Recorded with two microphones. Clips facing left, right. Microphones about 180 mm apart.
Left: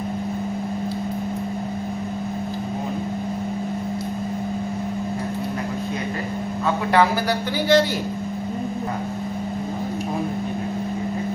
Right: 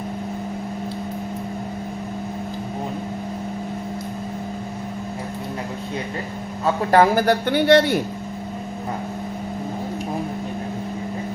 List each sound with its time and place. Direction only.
6.9 s speech: 45° right (ahead or behind)